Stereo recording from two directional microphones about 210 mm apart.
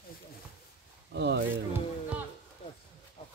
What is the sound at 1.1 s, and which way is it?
Speech, 55° right (ahead or behind).